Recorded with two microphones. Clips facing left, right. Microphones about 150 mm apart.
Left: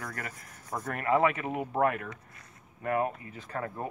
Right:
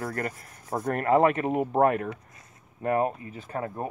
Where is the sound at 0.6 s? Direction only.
30° right (ahead or behind).